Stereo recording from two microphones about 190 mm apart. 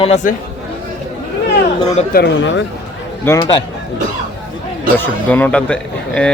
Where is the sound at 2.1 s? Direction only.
70° left (ahead or behind).